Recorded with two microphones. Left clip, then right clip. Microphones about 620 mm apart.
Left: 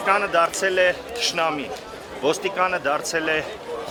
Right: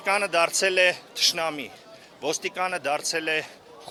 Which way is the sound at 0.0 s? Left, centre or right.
Right.